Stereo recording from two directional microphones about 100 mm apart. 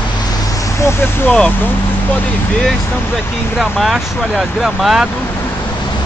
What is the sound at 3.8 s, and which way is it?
Speech, 5° right (ahead or behind).